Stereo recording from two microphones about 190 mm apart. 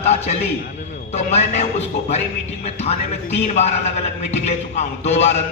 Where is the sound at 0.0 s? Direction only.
35° left (ahead or behind).